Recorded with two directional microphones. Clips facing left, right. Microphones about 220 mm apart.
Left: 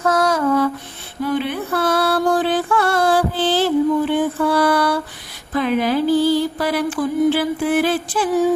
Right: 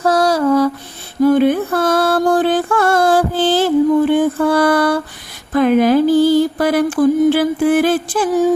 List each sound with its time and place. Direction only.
0.0 s a sound: 35° right (ahead or behind)
1.2 s music: 45° right (ahead or behind)
5.5 s mantra: 50° right (ahead or behind)